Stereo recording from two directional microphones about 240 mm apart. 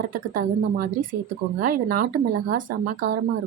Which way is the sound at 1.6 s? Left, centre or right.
Right.